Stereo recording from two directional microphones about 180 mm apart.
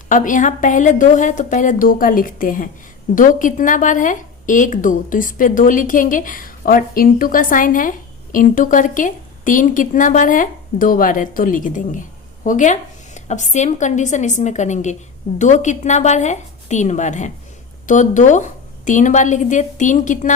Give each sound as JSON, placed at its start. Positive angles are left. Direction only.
{"t": 0.1, "sound": "a woman's voice", "side_deg": 45}